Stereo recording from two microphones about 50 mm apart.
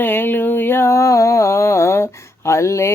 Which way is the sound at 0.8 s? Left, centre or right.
Left.